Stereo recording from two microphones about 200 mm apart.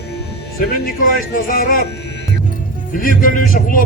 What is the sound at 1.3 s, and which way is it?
Speech, 45° left (ahead or behind).